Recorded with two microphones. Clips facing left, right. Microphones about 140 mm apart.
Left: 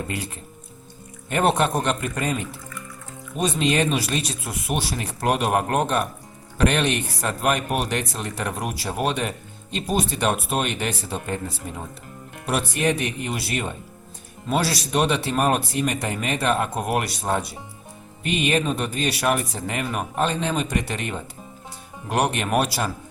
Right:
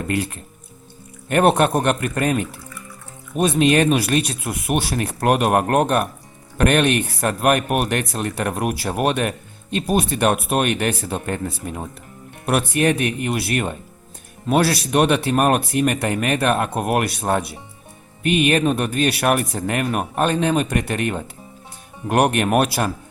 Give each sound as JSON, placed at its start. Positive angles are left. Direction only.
{"t": 1.3, "sound": "speech", "side_deg": -60}